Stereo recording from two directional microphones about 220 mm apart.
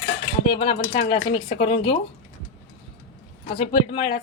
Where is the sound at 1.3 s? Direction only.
20° left (ahead or behind).